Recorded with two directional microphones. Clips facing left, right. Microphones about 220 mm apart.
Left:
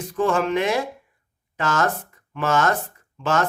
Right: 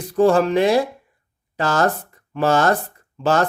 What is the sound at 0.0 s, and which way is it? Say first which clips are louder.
Speech: right 6 dB; 35° right (ahead or behind).